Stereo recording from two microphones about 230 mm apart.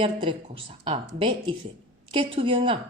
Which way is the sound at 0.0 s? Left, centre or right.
Right.